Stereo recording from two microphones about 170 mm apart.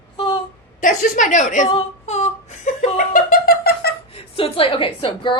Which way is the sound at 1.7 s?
40° left (ahead or behind).